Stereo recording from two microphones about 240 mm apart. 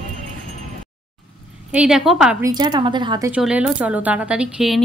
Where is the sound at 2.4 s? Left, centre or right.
Centre.